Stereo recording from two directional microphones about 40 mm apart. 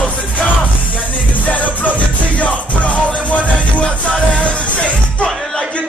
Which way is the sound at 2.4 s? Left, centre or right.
Left.